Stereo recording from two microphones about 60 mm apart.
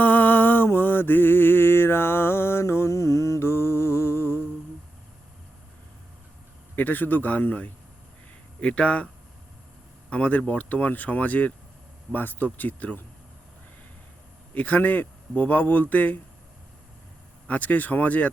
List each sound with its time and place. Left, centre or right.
0.0 s mantra: left
6.7 s a man's voice: left
10.1 s a man's voice: left
14.5 s a man's voice: left
17.5 s a man's voice: left